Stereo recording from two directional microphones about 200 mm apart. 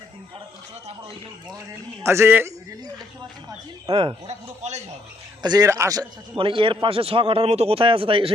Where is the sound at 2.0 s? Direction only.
15° right (ahead or behind); by 4.8 s 35° right (ahead or behind).